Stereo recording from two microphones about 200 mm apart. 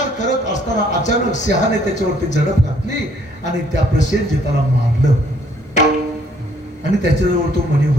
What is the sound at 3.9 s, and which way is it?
Speech, 35° left (ahead or behind).